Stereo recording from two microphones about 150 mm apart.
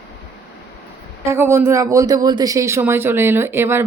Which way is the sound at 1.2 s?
15° right (ahead or behind).